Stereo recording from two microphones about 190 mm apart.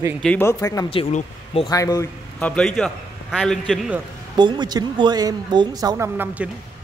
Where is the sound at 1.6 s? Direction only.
20° left (ahead or behind).